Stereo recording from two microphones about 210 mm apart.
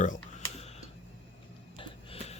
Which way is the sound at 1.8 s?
30° left (ahead or behind).